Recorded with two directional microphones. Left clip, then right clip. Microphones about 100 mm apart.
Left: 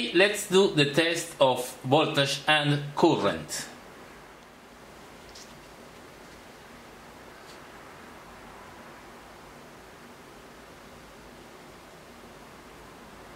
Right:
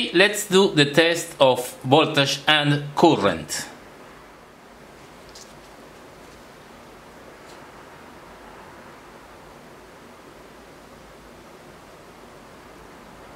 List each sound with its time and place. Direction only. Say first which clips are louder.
0.1 s speech: right 4 dB; 50° right (ahead or behind)